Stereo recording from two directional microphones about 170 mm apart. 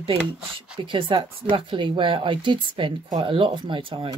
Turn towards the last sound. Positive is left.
turn(degrees=-30)  # may be behind; listen again after turning